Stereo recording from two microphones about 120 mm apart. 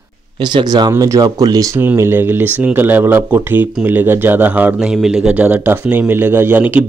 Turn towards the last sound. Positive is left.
turn(degrees=-15)  # may be behind; listen again after turning